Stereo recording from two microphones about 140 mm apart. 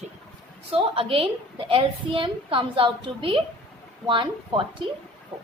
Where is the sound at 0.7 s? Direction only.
40° right (ahead or behind).